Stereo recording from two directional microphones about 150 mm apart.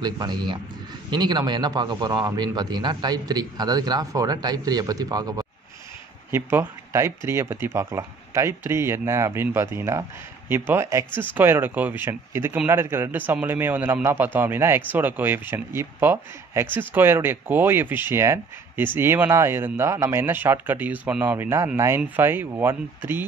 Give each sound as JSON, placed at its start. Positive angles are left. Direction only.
{"t": 0.0, "sound": "a man's voice", "side_deg": -30}